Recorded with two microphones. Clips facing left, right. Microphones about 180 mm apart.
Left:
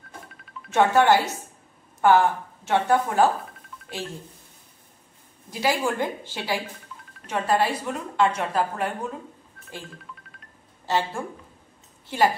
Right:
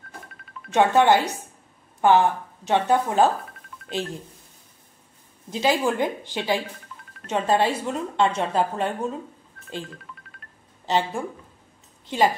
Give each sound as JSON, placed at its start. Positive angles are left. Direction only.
{"t": 0.3, "sound": "music", "side_deg": 0}
{"t": 0.7, "sound": "a woman's voice", "side_deg": -15}
{"t": 5.5, "sound": "a woman's voice", "side_deg": -20}
{"t": 10.9, "sound": "speech", "side_deg": -15}